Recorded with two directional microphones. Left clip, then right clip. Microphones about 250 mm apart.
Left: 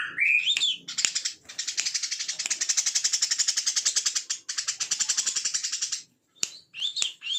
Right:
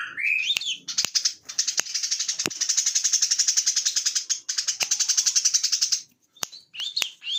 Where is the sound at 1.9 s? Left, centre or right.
Centre.